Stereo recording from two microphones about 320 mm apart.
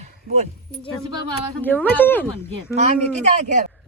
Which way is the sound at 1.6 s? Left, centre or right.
Centre.